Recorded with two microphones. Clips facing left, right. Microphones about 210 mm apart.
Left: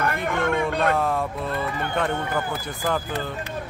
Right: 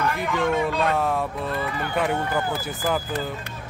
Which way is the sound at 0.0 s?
55° left (ahead or behind).